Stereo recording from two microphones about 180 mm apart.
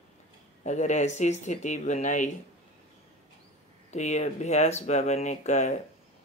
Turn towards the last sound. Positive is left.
turn(degrees=40)  # may be behind; listen again after turning